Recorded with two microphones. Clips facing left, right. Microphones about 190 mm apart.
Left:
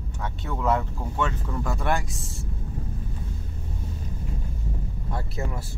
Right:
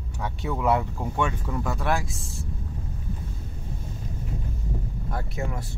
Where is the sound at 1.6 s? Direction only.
Centre (ahead or behind).